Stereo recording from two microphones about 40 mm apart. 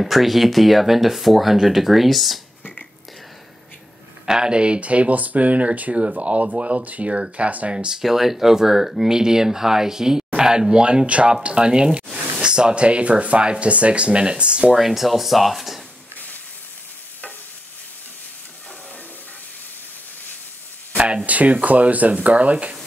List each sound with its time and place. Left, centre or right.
0.0 s speech: centre
4.3 s speech: right
4.7 s speech: right
7.7 s speech: right
8.0 s speech: centre; by 14.7 s right
14.7 s speech: centre
21.3 s speech: right